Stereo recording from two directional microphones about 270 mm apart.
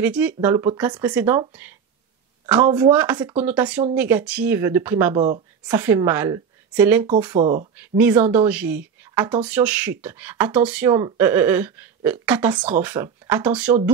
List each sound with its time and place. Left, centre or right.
0.0 s speech: centre
5.1 s speech: right
5.8 s speech: centre
7.3 s speech: right
8.0 s speech: centre